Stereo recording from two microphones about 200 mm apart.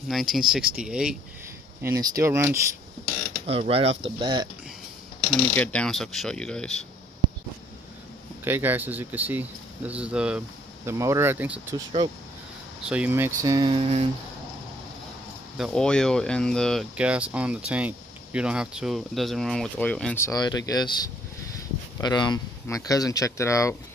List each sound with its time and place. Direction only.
0.1 s speech: centre (ahead or behind)
1.8 s speech: 15° right (ahead or behind)
3.4 s creak: 30° right (ahead or behind)
5.5 s speech: 5° left (ahead or behind)
8.5 s speech: 10° right (ahead or behind)
11.7 s creak: 25° right (ahead or behind)
12.8 s speech: 5° right (ahead or behind); by 14.0 s 30° right (ahead or behind)
15.5 s speech: centre (ahead or behind)